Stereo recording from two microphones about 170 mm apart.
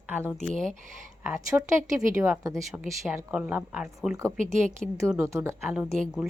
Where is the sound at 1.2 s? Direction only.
15° right (ahead or behind).